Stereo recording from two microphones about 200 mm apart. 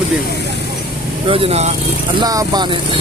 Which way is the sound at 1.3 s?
30° right (ahead or behind).